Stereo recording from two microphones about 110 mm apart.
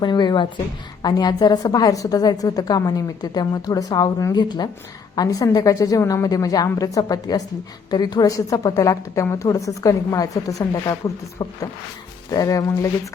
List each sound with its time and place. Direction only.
0.0 s a woman's voice: 40° left (ahead or behind)